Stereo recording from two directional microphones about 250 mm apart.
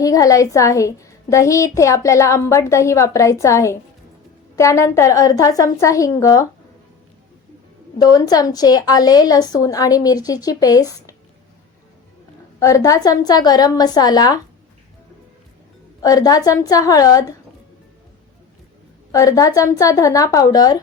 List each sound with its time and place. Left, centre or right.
0.0 s a woman's voice: centre
7.9 s a woman's voice: centre
12.5 s a woman's voice: centre
16.0 s a woman's voice: centre
19.1 s a woman's voice: centre